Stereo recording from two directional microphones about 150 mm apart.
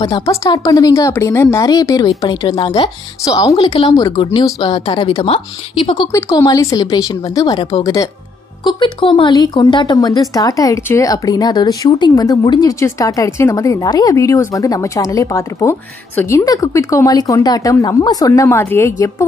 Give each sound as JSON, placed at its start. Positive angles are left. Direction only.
{"t": 0.2, "sound": "a woman's voice", "side_deg": 20}
{"t": 2.0, "sound": "a woman's voice", "side_deg": 35}
{"t": 6.1, "sound": "a woman's voice", "side_deg": 20}